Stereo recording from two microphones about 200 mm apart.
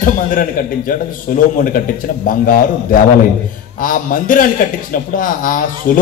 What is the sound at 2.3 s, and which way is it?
A man's voice, 45° left (ahead or behind).